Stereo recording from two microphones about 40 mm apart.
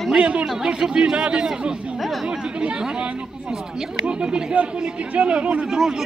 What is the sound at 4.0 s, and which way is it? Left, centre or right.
A man's voice, right.